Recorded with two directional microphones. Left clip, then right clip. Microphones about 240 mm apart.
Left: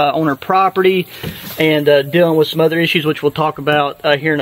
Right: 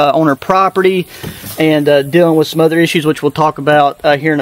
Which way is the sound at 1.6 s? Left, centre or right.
Right.